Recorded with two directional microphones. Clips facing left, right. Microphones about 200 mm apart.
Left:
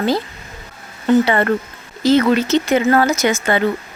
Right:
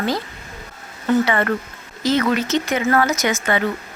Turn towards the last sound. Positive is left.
turn(degrees=30)  # may be behind; listen again after turning